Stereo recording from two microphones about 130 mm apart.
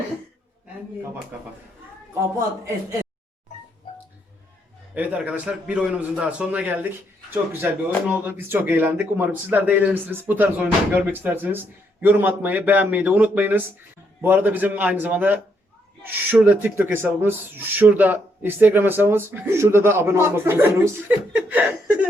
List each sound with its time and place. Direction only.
4.9 s speech: 10° right (ahead or behind)
21.3 s laughter: 10° right (ahead or behind)